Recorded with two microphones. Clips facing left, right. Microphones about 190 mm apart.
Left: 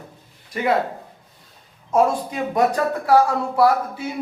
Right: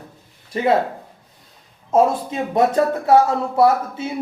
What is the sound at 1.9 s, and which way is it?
A man's voice, 25° right (ahead or behind).